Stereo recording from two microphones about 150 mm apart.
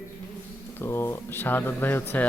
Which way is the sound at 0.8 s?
15° left (ahead or behind).